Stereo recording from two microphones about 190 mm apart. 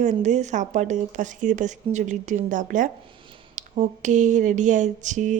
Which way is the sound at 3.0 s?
25° right (ahead or behind).